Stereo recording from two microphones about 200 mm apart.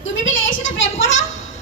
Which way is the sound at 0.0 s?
75° left (ahead or behind).